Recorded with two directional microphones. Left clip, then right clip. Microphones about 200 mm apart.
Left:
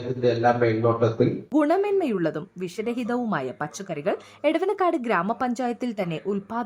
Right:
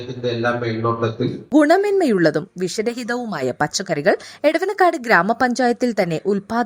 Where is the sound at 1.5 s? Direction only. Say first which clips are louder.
Right 10 dB; 15° right (ahead or behind).